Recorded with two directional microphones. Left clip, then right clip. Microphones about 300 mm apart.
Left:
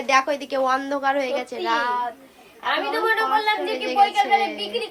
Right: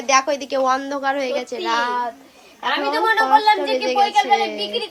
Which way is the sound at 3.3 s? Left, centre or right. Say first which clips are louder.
Right 6 dB; centre.